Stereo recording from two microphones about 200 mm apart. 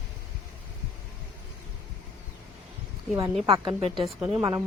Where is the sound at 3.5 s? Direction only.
25° right (ahead or behind).